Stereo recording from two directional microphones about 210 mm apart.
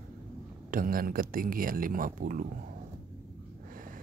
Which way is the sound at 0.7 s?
40° right (ahead or behind).